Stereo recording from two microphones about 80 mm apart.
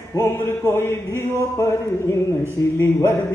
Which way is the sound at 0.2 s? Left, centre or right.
Left.